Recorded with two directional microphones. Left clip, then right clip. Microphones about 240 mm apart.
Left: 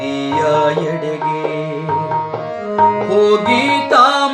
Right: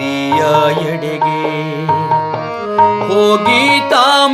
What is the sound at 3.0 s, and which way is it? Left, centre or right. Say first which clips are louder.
Music: right 2 dB; right.